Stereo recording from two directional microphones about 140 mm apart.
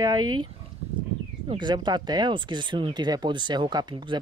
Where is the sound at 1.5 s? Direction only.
35° right (ahead or behind).